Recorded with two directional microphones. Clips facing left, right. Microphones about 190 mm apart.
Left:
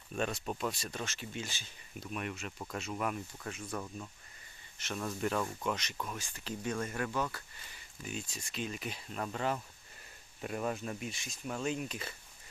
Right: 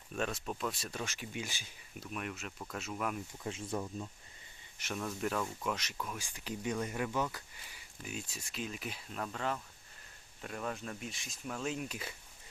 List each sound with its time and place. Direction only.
0.1 s speech: centre (ahead or behind)
2.0 s speech: centre (ahead or behind)
3.5 s speech: 25° right (ahead or behind)
4.9 s speech: centre (ahead or behind)
6.2 s speech: 15° right (ahead or behind)
8.0 s speech: 5° right (ahead or behind)